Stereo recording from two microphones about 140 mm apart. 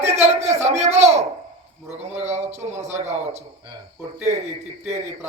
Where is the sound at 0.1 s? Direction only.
50° right (ahead or behind).